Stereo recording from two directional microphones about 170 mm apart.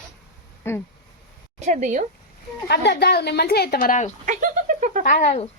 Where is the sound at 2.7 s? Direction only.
75° left (ahead or behind); by 4.1 s 50° left (ahead or behind).